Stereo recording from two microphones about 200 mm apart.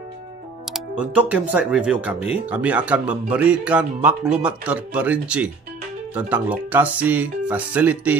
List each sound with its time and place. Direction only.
0.7 s speech: 5° right (ahead or behind)